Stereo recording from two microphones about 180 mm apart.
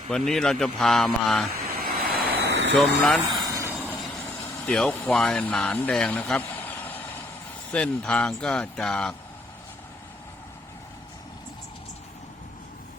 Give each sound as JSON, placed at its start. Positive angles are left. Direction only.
{"t": 0.1, "sound": "speech", "side_deg": 0}
{"t": 1.7, "sound": "vehicle", "side_deg": -55}
{"t": 2.4, "sound": "vehicle", "side_deg": -75}
{"t": 3.0, "sound": "speech", "side_deg": 0}
{"t": 3.5, "sound": "vehicle", "side_deg": -15}
{"t": 4.6, "sound": "speech", "side_deg": 5}